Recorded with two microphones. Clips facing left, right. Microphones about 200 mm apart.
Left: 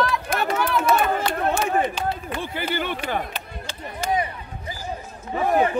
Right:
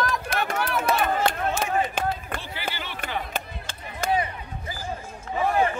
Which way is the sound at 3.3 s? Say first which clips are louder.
Right 1 dB; 50° right (ahead or behind).